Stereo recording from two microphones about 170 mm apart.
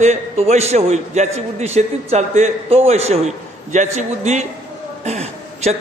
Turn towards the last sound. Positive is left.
turn(degrees=-40)  # may be behind; listen again after turning